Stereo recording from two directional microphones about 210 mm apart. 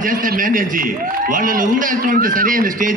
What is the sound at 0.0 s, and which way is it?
A man's voice, 40° right (ahead or behind).